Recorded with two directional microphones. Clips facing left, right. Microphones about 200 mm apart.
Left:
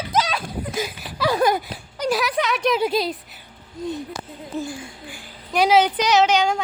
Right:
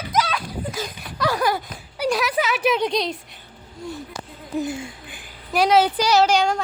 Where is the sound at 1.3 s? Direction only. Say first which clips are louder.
Left 4 dB; 20° left (ahead or behind).